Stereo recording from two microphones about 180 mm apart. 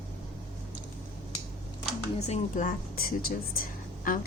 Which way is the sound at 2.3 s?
45° left (ahead or behind).